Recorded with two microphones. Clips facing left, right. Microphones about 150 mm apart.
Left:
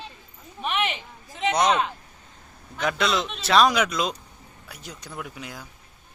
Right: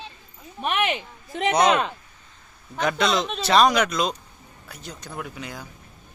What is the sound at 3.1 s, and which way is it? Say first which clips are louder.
Speech: right 2 dB; 40° right (ahead or behind).